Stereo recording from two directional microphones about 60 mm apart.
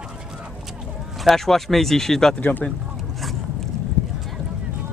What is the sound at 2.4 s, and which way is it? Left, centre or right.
Speech, left.